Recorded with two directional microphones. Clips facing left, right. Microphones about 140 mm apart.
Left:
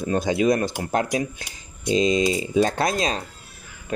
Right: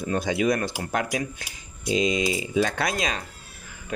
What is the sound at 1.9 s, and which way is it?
Speech, 30° left (ahead or behind).